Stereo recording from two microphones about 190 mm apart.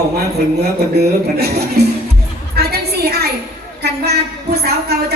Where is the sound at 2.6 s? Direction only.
55° right (ahead or behind).